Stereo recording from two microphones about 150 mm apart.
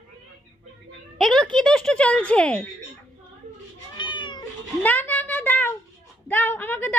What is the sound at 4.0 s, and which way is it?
Cat, 30° left (ahead or behind).